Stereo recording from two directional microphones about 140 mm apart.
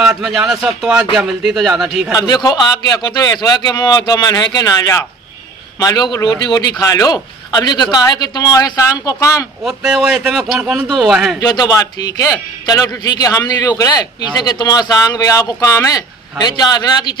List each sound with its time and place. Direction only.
0.0 s a man's voice: 5° right (ahead or behind)
2.1 s a man's voice: 25° left (ahead or behind)
9.7 s a man's voice: 5° right (ahead or behind)
11.3 s a man's voice: 30° left (ahead or behind)